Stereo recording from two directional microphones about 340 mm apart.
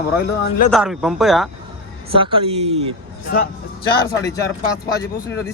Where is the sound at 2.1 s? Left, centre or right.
Centre.